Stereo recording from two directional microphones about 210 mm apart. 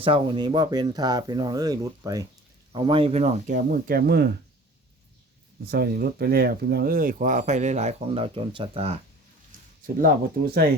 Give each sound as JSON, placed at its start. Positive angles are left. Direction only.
{"t": 0.0, "sound": "speech", "side_deg": -25}
{"t": 5.7, "sound": "speech", "side_deg": -45}
{"t": 9.5, "sound": "speech", "side_deg": -40}